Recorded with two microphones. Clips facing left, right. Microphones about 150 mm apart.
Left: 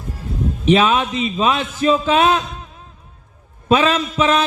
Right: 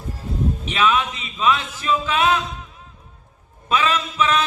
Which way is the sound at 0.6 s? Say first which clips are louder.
Left 7 dB; 25° left (ahead or behind).